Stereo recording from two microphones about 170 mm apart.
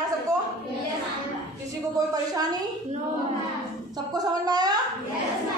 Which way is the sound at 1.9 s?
20° right (ahead or behind).